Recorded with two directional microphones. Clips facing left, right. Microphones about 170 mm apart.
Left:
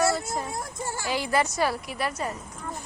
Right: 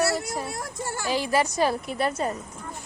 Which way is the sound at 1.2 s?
15° right (ahead or behind).